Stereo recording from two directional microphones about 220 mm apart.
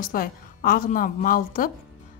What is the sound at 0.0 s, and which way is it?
A woman's voice, 40° left (ahead or behind).